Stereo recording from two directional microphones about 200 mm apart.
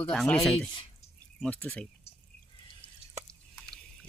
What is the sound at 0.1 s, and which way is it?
Speech, 5° left (ahead or behind).